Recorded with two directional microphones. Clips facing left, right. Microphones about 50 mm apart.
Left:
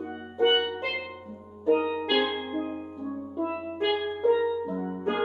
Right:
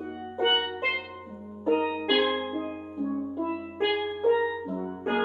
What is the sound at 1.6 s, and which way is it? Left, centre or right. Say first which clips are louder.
Music: left 1 dB; right.